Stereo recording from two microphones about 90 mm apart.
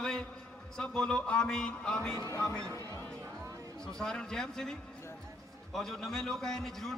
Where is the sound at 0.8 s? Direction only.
10° left (ahead or behind).